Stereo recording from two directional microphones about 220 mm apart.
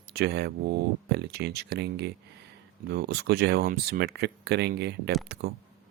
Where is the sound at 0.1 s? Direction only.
45° right (ahead or behind).